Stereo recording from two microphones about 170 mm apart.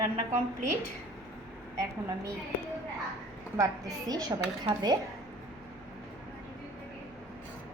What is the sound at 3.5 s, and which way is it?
Speech, 20° right (ahead or behind).